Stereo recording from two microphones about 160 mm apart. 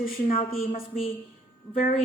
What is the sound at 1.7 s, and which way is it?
Speech, 60° left (ahead or behind).